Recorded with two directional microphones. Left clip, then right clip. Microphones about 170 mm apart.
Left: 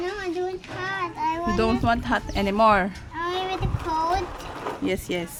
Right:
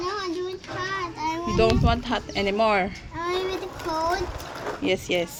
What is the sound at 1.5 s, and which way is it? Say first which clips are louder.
Speech: right 4 dB; 45° left (ahead or behind).